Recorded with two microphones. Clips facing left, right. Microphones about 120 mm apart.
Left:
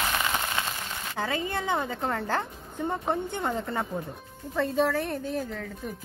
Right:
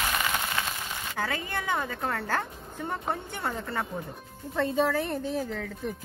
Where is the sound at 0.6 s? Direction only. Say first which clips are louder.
Left 1 dB; 25° left (ahead or behind).